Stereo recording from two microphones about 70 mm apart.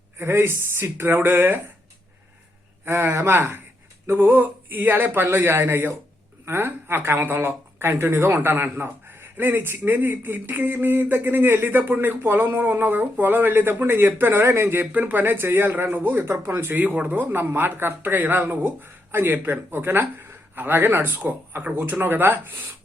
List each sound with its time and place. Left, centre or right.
0.2 s a woman's voice: right
2.8 s a woman's voice: right
17.2 s speech: right